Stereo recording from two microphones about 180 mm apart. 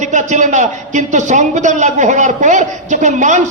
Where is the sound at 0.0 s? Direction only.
40° right (ahead or behind).